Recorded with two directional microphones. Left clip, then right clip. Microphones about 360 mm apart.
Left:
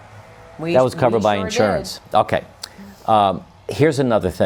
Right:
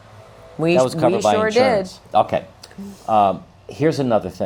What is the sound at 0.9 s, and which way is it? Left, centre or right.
Speech, left.